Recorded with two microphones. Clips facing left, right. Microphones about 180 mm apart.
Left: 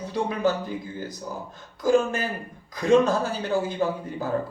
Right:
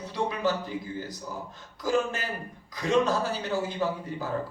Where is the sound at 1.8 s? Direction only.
50° left (ahead or behind).